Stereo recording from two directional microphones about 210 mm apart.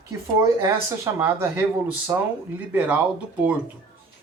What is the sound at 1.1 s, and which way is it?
Speech, 10° right (ahead or behind).